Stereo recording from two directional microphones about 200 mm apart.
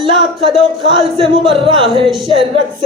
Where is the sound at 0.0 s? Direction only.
25° right (ahead or behind).